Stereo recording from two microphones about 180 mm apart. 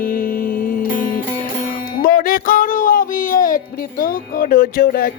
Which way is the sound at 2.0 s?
55° left (ahead or behind).